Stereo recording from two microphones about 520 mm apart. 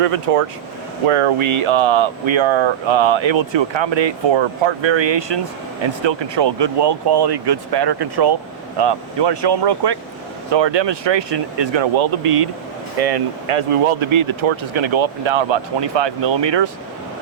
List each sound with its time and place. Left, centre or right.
0.0 s speech: right
1.0 s speech: right
13.0 s speech: right